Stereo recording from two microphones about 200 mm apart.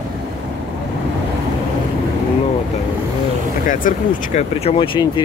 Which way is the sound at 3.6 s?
40° left (ahead or behind).